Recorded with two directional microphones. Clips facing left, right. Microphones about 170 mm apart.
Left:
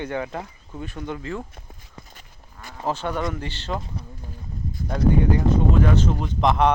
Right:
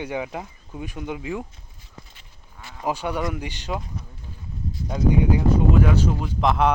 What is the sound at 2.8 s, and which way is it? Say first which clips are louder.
Speech: even; 10° right (ahead or behind).